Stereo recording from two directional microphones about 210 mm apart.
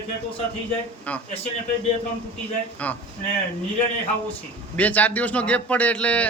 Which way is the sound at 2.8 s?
5° left (ahead or behind).